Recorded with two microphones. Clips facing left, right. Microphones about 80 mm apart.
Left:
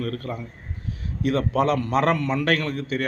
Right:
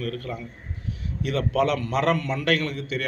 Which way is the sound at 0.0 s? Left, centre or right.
Left.